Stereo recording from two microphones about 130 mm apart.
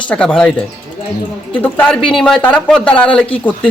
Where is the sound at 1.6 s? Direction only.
15° left (ahead or behind).